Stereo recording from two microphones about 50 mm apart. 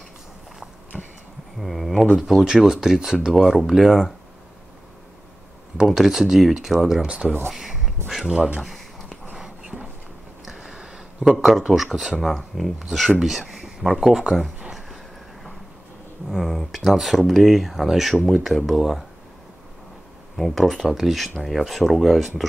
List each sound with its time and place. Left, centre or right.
0.9 s bee: centre
1.6 s a sound: centre
2.1 s speech: centre
5.9 s speech: centre
7.1 s speech: right
7.5 s a sound: centre
8.5 s speech: centre
9.3 s a sound: centre
11.2 s speech: centre
13.2 s a sound: centre
13.8 s speech: centre
16.3 s speech: centre
20.3 s speech: centre